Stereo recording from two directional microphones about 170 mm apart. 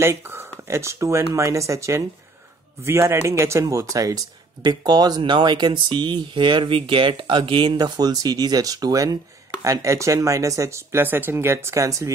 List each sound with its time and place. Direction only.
0.0 s speech: 15° right (ahead or behind)